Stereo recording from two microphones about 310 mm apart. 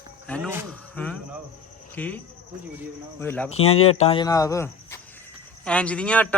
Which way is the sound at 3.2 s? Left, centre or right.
Centre.